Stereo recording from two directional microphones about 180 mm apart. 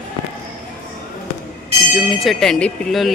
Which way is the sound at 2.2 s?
Centre (ahead or behind).